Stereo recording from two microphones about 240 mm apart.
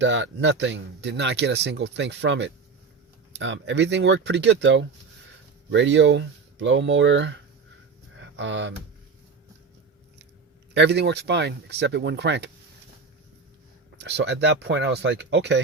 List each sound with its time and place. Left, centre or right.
0.0 s speech: right
10.8 s speech: right
14.0 s speech: right